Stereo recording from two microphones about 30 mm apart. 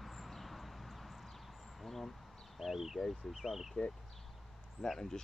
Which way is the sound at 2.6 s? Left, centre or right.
Centre.